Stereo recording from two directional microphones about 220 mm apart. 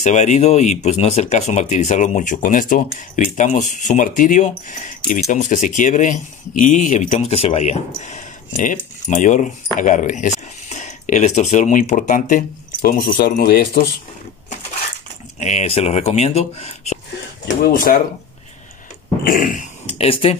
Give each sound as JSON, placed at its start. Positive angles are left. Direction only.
{"t": 0.0, "sound": "speech", "side_deg": 30}
{"t": 15.3, "sound": "speech", "side_deg": 30}
{"t": 19.2, "sound": "speech", "side_deg": 40}